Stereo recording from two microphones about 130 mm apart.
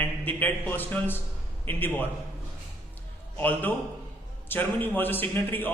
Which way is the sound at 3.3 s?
15° left (ahead or behind).